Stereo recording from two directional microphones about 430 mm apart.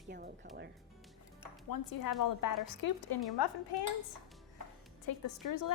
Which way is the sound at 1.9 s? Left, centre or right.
Left.